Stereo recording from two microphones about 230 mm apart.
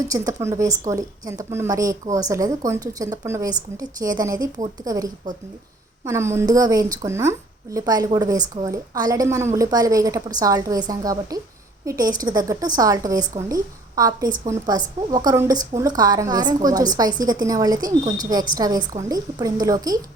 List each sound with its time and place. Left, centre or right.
0.0 s a woman's voice: centre